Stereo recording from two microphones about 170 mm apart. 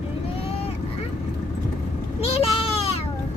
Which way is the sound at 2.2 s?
35° left (ahead or behind).